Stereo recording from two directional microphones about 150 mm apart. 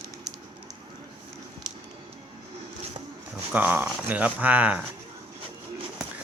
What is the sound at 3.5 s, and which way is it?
Speech, 10° right (ahead or behind).